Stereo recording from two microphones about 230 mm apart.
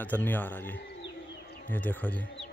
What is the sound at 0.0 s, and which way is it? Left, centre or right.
A man's voice, centre.